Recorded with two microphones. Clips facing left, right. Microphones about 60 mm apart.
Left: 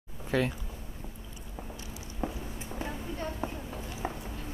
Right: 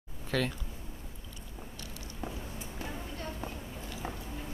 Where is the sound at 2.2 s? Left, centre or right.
Left.